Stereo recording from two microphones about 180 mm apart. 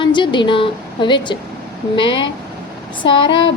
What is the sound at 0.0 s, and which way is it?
A woman's voice, 25° left (ahead or behind).